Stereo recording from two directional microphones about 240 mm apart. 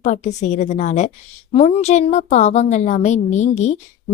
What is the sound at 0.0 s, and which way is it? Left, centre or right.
A woman's voice, left.